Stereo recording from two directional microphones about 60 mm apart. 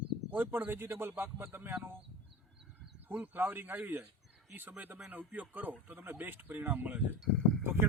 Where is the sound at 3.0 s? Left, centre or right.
Right.